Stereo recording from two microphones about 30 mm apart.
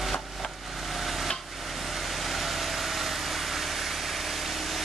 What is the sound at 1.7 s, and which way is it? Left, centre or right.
Vehicle, centre.